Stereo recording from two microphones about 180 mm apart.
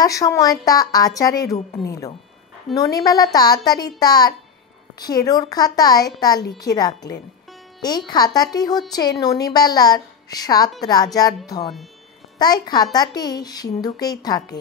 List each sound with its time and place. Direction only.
0.0 s a woman's voice: 20° left (ahead or behind)
8.1 s a woman's voice: 20° left (ahead or behind)